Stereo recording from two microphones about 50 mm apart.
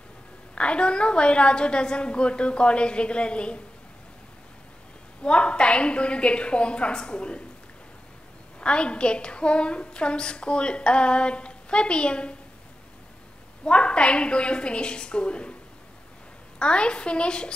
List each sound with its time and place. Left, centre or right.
0.6 s a woman's voice: left
5.2 s a woman's voice: left
8.5 s a woman's voice: left
13.7 s a woman's voice: left
16.5 s a woman's voice: centre